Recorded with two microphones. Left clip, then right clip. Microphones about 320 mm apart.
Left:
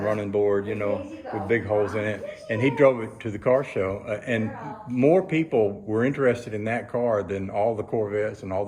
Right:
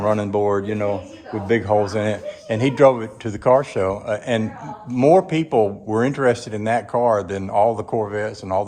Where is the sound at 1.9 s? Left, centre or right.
Centre.